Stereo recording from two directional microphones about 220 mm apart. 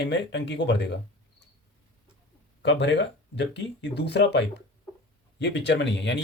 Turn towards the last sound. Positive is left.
turn(degrees=50)  # may be behind; listen again after turning